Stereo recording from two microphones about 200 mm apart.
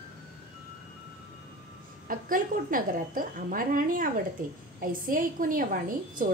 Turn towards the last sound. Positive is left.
turn(degrees=-45)  # may be behind; listen again after turning